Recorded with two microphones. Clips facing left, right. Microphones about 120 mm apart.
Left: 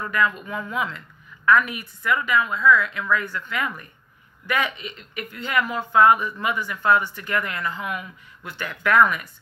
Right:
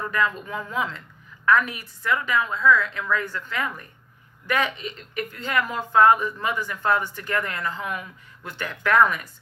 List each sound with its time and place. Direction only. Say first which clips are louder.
0.4 s a woman's voice: left 1 dB; 35° right (ahead or behind)